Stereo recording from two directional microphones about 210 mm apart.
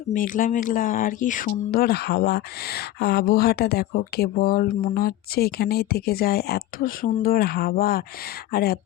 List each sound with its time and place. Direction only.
0.1 s speech: 40° left (ahead or behind)